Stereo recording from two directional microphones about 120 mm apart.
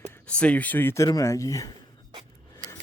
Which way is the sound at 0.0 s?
15° left (ahead or behind).